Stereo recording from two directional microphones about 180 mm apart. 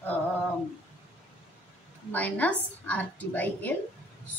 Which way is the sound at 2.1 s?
10° left (ahead or behind).